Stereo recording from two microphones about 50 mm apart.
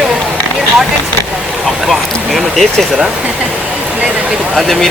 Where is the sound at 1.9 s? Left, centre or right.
Centre.